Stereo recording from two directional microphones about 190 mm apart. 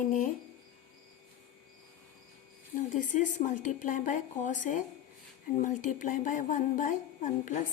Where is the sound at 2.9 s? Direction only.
40° left (ahead or behind).